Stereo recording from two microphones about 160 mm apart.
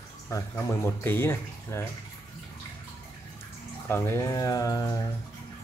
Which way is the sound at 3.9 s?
15° left (ahead or behind).